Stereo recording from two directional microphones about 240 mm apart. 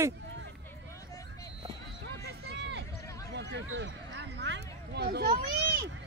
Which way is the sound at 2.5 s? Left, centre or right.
Right.